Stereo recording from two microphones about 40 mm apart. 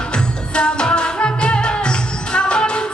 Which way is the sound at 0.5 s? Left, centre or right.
Left.